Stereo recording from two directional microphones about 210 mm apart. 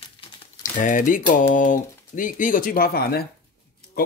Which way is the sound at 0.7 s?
40° left (ahead or behind).